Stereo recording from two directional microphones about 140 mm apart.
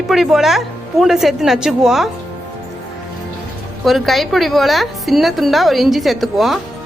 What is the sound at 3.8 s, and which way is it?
A woman's voice, centre (ahead or behind).